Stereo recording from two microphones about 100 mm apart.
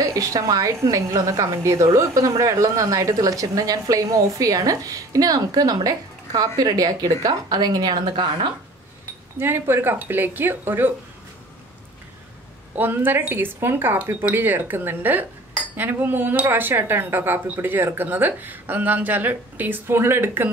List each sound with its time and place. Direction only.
0.0 s a woman's voice: 35° right (ahead or behind)
9.4 s speech: 25° right (ahead or behind)
12.7 s speech: 20° right (ahead or behind)